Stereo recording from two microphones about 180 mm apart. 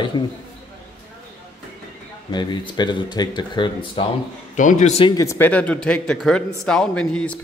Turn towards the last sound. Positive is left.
turn(degrees=5)  # may be behind; listen again after turning